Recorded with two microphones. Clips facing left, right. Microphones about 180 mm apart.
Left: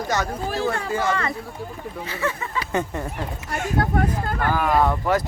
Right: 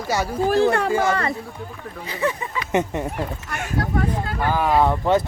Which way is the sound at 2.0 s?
15° right (ahead or behind).